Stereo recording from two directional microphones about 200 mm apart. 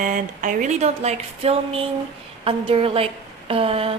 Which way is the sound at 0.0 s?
40° right (ahead or behind).